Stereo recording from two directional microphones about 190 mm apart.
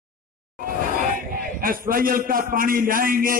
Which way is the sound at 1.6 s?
50° right (ahead or behind).